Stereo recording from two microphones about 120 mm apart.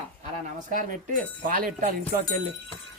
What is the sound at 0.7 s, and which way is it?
Speech, 90° right.